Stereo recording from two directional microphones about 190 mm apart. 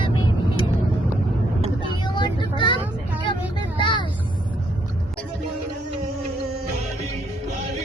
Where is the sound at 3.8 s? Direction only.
25° left (ahead or behind).